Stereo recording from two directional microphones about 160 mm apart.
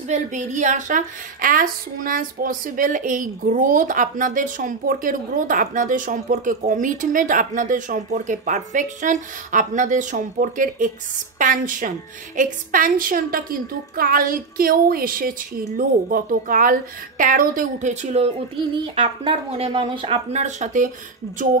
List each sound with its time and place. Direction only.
0.1 s a woman's voice: 50° right (ahead or behind)
18.8 s speech: 30° right (ahead or behind); by 20.9 s 50° right (ahead or behind)